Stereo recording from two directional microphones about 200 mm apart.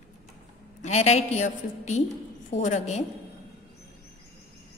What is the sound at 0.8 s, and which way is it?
A woman's voice, 35° left (ahead or behind).